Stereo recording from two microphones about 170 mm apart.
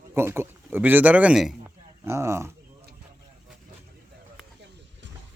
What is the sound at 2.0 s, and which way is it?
Speech, 15° right (ahead or behind).